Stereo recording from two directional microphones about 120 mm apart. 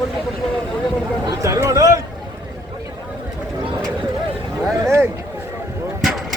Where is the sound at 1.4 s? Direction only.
25° right (ahead or behind).